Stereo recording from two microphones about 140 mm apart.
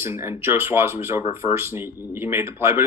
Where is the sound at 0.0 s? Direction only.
15° right (ahead or behind).